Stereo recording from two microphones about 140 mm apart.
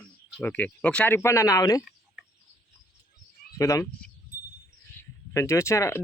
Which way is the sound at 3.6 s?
20° left (ahead or behind).